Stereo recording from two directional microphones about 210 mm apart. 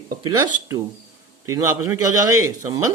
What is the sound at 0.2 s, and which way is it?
Speech, 20° right (ahead or behind).